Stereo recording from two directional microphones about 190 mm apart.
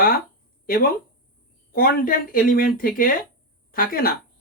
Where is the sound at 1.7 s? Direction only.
45° left (ahead or behind).